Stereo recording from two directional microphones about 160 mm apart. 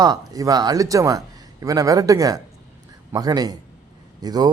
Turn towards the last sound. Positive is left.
turn(degrees=-25)  # may be behind; listen again after turning